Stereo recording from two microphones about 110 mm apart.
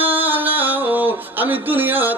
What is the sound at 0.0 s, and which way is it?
Music, 15° right (ahead or behind).